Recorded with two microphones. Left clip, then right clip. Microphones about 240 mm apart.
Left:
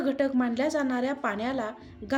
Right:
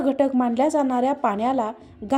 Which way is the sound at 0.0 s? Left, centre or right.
Right.